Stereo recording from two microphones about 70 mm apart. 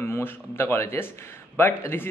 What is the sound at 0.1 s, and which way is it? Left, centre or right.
A man's voice, left.